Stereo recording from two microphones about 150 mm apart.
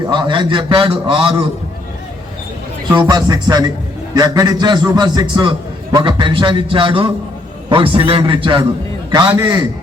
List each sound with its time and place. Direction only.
0.1 s a man's voice: 30° right (ahead or behind)
2.9 s a man's voice: 30° right (ahead or behind)